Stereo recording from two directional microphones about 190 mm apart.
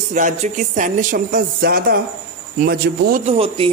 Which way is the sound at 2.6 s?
45° right (ahead or behind).